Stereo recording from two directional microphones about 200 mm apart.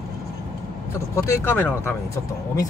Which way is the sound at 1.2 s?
10° left (ahead or behind).